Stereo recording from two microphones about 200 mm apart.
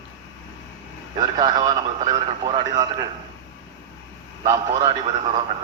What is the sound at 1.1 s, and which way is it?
Speech, 20° right (ahead or behind).